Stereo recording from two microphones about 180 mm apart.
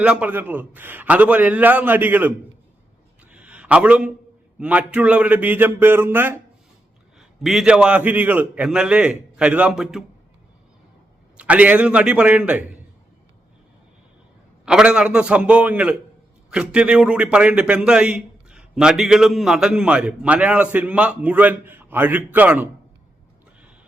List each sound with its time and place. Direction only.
0.0 s a man's voice: 5° right (ahead or behind)
3.3 s a sound: 5° right (ahead or behind)
4.6 s a man's voice: 5° right (ahead or behind)
11.3 s a man's voice: 10° right (ahead or behind)
14.6 s a man's voice: 5° right (ahead or behind)